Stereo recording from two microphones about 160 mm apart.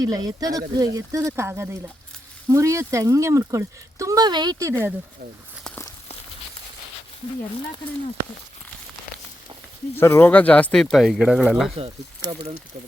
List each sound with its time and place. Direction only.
0.0 s speech: 25° right (ahead or behind)
5.6 s walk: 10° left (ahead or behind)
9.9 s speech: 15° left (ahead or behind)
12.2 s speech: 35° right (ahead or behind)